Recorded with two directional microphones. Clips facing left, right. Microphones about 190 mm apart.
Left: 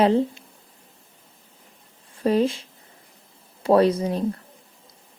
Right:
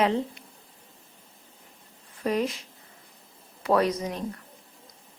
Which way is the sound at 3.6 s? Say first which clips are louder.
Left 6 dB; 30° left (ahead or behind).